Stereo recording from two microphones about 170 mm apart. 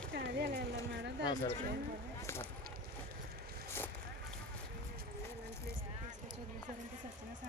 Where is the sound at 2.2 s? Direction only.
15° left (ahead or behind).